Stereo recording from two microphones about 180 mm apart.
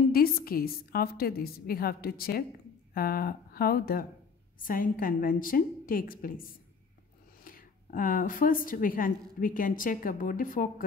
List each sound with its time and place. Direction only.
0.1 s a woman's voice: 55° left (ahead or behind)
7.4 s a woman's voice: 50° left (ahead or behind)